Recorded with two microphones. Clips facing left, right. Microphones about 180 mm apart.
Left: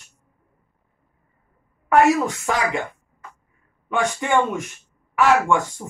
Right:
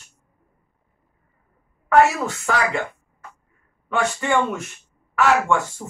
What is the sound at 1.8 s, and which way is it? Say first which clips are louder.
Speech: left 1 dB; 15° left (ahead or behind).